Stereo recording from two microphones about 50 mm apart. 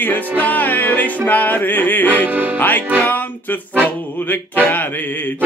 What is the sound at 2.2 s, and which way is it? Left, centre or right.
Speech, right.